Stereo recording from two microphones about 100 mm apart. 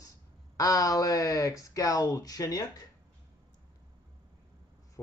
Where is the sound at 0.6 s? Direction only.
35° left (ahead or behind).